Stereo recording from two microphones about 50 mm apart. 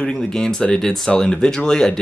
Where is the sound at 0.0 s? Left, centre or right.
Centre.